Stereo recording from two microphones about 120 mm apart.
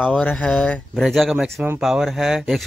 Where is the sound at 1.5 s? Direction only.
20° right (ahead or behind).